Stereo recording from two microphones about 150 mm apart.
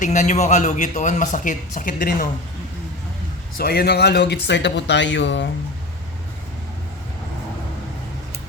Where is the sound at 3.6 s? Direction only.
90° left.